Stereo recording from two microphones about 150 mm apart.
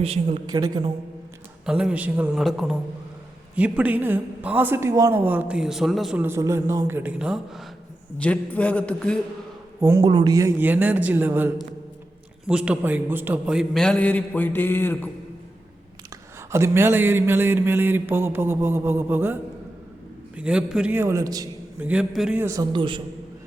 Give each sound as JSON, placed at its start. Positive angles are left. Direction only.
{"t": 0.0, "sound": "a man's voice", "side_deg": -40}
{"t": 0.5, "sound": "speech", "side_deg": -25}
{"t": 1.6, "sound": "mantra", "side_deg": -5}
{"t": 2.4, "sound": "a man's voice", "side_deg": 0}
{"t": 3.5, "sound": "mantra", "side_deg": -10}
{"t": 6.2, "sound": "mantra", "side_deg": -20}
{"t": 8.2, "sound": "a man's voice", "side_deg": 10}
{"t": 10.0, "sound": "speech", "side_deg": -30}
{"t": 10.6, "sound": "mantra", "side_deg": -10}
{"t": 12.5, "sound": "a man's voice", "side_deg": -5}
{"t": 16.5, "sound": "mantra", "side_deg": -20}
{"t": 21.8, "sound": "mantra", "side_deg": -10}
{"t": 22.4, "sound": "speech", "side_deg": -20}
{"t": 22.7, "sound": "a man's voice", "side_deg": -35}